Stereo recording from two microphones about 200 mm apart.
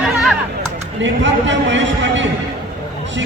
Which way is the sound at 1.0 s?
65° right (ahead or behind).